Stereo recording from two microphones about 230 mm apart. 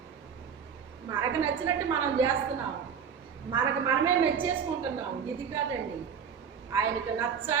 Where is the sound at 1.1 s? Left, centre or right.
Centre.